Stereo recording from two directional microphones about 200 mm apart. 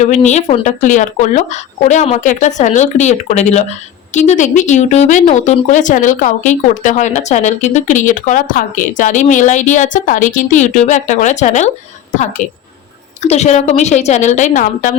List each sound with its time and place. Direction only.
0.0 s speech: 35° left (ahead or behind)